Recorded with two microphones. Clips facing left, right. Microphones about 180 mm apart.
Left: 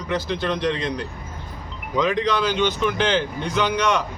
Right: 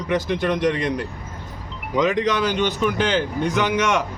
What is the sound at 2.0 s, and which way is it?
Speech, 45° right (ahead or behind).